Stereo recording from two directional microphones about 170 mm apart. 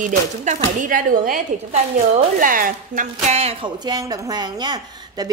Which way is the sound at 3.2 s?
40° right (ahead or behind).